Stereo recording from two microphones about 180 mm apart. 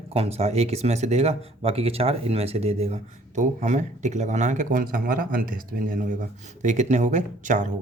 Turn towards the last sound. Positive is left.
turn(degrees=-45)  # may be behind; listen again after turning